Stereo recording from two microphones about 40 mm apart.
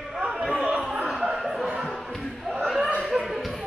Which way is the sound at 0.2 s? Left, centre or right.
Centre.